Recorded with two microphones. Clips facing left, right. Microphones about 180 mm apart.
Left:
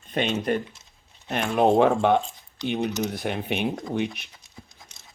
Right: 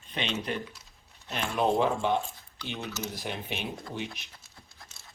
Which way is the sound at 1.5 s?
55° left (ahead or behind).